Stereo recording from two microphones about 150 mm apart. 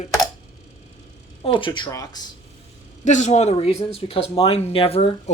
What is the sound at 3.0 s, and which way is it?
Speech, 55° left (ahead or behind).